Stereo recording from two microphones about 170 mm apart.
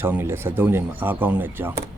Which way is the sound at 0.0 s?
10° right (ahead or behind).